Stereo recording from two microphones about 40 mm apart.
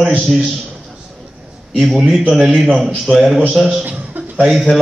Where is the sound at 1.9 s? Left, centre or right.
Centre.